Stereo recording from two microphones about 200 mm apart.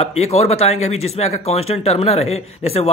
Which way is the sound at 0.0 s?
30° left (ahead or behind).